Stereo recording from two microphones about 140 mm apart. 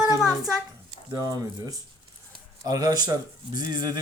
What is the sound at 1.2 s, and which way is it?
Speech, 25° right (ahead or behind).